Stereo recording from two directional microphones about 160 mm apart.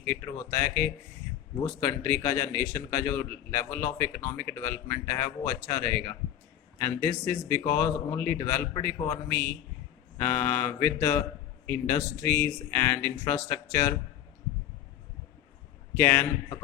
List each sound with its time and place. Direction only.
0.0 s a man's voice: 15° left (ahead or behind)
16.0 s a man's voice: 15° left (ahead or behind)